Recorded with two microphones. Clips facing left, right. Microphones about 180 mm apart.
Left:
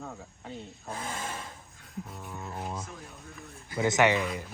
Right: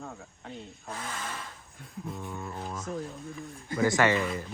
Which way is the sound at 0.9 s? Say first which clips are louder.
Left 2 dB; 30° left (ahead or behind).